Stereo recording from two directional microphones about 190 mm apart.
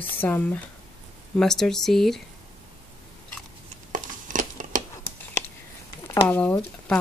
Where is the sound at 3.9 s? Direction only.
40° right (ahead or behind).